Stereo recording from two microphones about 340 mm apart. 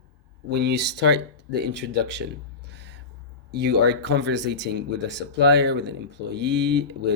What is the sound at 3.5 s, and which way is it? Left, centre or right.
Speech, right.